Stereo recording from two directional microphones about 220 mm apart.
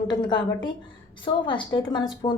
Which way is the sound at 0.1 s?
20° left (ahead or behind).